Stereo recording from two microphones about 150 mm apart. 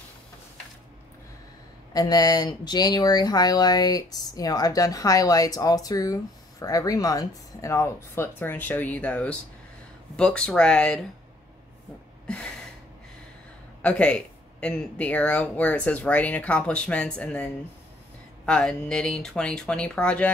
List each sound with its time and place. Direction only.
2.0 s speech: 25° left (ahead or behind); by 11.1 s 5° left (ahead or behind)
13.8 s speech: 5° left (ahead or behind)